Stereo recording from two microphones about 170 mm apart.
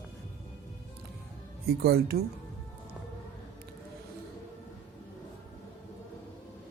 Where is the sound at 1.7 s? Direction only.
65° right (ahead or behind).